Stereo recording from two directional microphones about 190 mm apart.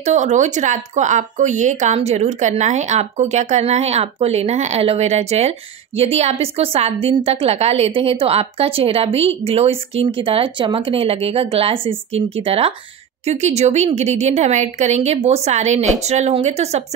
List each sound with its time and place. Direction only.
0.0 s speech: 40° right (ahead or behind)